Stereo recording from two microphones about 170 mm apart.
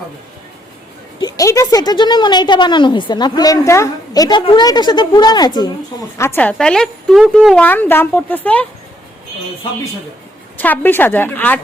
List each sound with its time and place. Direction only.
1.2 s a woman's voice: 20° left (ahead or behind)
10.6 s a woman's voice: 10° left (ahead or behind)